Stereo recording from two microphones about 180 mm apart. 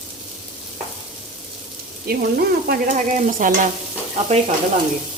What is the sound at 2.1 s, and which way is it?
Stir, 60° right (ahead or behind).